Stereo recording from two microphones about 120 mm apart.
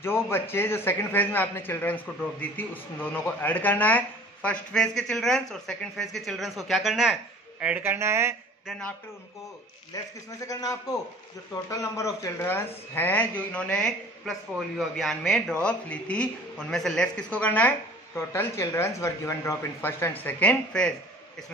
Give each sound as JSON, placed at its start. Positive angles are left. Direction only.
{"t": 0.0, "sound": "speech", "side_deg": 20}
{"t": 7.6, "sound": "speech", "side_deg": -15}
{"t": 8.6, "sound": "speech", "side_deg": 5}
{"t": 9.9, "sound": "a man's voice", "side_deg": 30}